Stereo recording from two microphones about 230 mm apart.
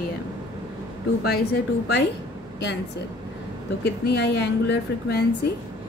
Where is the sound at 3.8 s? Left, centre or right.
Left.